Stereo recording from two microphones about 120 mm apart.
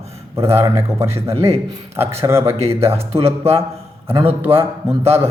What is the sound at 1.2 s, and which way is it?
Speech, 55° right (ahead or behind).